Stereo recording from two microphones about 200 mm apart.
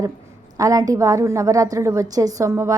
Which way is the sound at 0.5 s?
15° right (ahead or behind).